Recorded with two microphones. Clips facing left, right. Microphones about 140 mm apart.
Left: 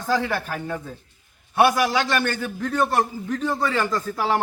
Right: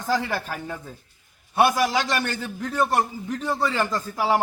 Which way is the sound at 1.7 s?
15° right (ahead or behind).